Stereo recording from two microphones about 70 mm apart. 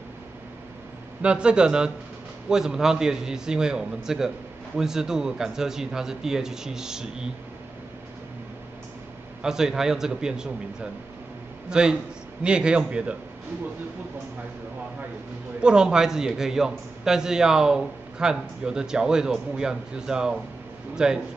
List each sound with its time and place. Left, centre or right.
1.2 s a man's voice: centre
9.4 s a man's voice: centre
15.6 s a man's voice: centre